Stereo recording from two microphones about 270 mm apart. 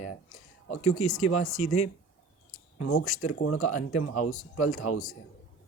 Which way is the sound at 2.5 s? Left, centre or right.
Left.